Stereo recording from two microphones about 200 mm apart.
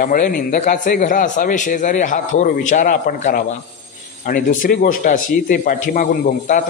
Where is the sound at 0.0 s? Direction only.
45° left (ahead or behind).